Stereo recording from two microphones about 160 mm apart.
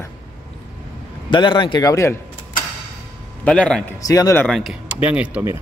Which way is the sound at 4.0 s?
20° left (ahead or behind).